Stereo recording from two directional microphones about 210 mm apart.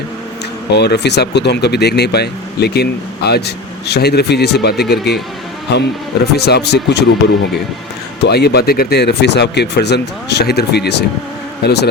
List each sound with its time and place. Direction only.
0.7 s a man's voice: 50° left (ahead or behind)
8.2 s speech: 50° left (ahead or behind)